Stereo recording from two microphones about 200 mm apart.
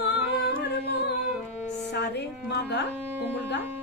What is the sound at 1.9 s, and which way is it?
Music, 60° left (ahead or behind).